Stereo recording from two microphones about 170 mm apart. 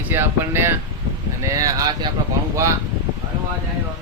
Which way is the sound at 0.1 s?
15° right (ahead or behind).